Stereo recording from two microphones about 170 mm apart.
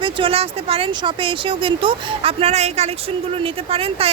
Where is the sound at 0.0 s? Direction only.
35° right (ahead or behind).